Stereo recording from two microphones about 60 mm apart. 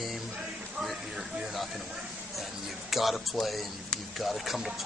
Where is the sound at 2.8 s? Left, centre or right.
Centre.